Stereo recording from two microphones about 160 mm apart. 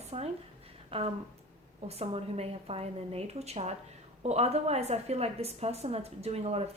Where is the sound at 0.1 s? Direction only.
40° right (ahead or behind).